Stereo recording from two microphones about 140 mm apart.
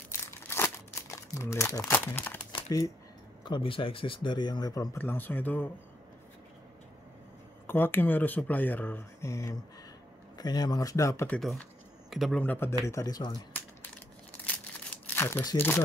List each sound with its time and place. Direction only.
0.3 s crumpling: 15° left (ahead or behind)
1.8 s speech: 15° left (ahead or behind)
3.4 s speech: 35° left (ahead or behind)
4.9 s speech: 15° left (ahead or behind)
7.6 s speech: 15° left (ahead or behind)
11.3 s speech: 5° left (ahead or behind)
12.4 s speech: 15° left (ahead or behind)
12.8 s speech: 25° left (ahead or behind)
15.1 s speech: 15° left (ahead or behind)